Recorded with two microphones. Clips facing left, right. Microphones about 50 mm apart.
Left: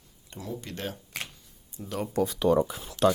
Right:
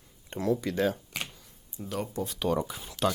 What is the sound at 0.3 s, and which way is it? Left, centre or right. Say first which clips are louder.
Speech: right 8 dB; right.